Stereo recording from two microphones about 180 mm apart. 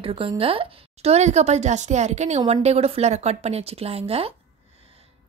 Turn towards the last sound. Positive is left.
turn(degrees=-35)  # may be behind; listen again after turning